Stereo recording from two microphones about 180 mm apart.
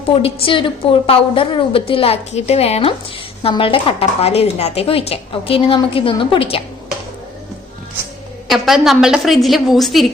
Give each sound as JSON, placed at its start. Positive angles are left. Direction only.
{"t": 0.1, "sound": "a woman's voice", "side_deg": 30}
{"t": 8.4, "sound": "a woman's voice", "side_deg": 0}